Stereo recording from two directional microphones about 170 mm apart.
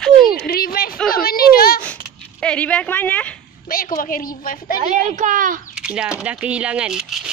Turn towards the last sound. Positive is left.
turn(degrees=-5)  # may be behind; listen again after turning